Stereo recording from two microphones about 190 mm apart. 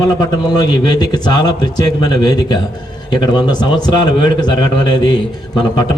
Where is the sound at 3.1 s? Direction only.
20° left (ahead or behind).